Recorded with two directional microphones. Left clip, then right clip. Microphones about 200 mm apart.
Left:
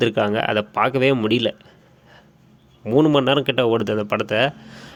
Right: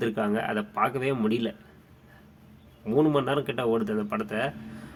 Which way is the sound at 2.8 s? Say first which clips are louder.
Left 7 dB; 35° left (ahead or behind).